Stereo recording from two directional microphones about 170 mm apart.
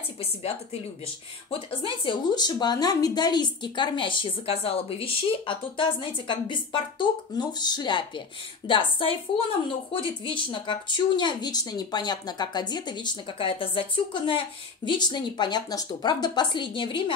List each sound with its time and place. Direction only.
1.5 s a woman's voice: 30° left (ahead or behind)
9.9 s a woman's voice: 30° left (ahead or behind)